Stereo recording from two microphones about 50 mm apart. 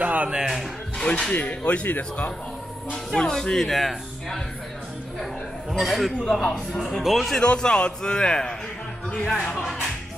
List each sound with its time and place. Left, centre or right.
0.0 s speech: right
0.5 s music: centre
1.3 s speech: left
3.1 s a man's voice: centre
5.2 s a sound: centre
6.3 s a man's voice: centre
7.0 s speech: centre
7.2 s a man's voice: centre
9.2 s speech: centre